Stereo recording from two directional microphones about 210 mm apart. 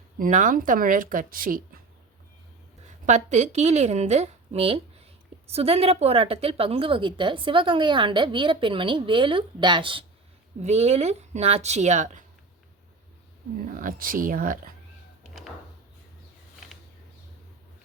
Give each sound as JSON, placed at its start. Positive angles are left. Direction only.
{"t": 0.2, "sound": "speech", "side_deg": -35}
{"t": 3.1, "sound": "a woman's voice", "side_deg": -35}
{"t": 13.7, "sound": "speech", "side_deg": -40}
{"t": 15.3, "sound": "drawer open or close", "side_deg": 0}